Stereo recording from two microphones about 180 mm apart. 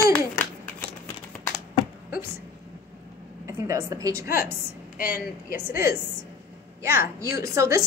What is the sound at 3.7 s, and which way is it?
Speech, 15° right (ahead or behind).